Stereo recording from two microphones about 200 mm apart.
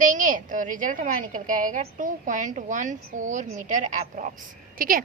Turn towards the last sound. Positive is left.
turn(degrees=-45)  # may be behind; listen again after turning